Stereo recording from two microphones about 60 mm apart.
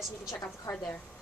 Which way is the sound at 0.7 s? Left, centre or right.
Left.